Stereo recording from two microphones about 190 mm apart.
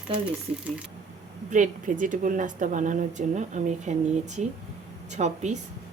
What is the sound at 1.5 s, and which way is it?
A woman's voice, 40° right (ahead or behind).